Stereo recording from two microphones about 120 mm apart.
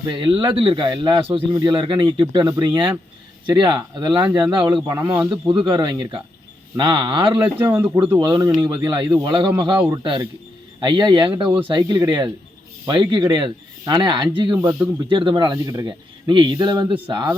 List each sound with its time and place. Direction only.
0.1 s speech: 45° right (ahead or behind)
1.5 s a man's voice: 35° right (ahead or behind)
7.6 s speech: 15° right (ahead or behind)
8.2 s a man's voice: 30° right (ahead or behind)
14.6 s speech: 30° right (ahead or behind)
15.1 s a man's voice: 40° right (ahead or behind)